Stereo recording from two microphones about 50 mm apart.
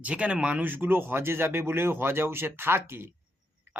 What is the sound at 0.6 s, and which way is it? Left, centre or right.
Speech, right.